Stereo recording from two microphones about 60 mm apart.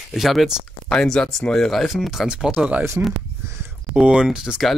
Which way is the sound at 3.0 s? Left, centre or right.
Right.